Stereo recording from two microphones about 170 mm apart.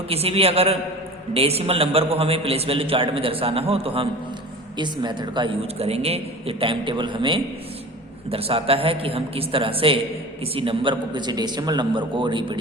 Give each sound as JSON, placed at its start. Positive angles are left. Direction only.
{"t": 0.1, "sound": "a man's voice", "side_deg": -35}